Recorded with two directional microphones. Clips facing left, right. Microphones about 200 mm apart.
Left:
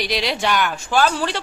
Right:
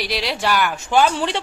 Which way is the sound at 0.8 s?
20° right (ahead or behind).